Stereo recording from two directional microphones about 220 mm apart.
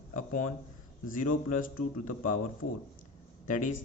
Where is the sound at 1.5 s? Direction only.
40° left (ahead or behind).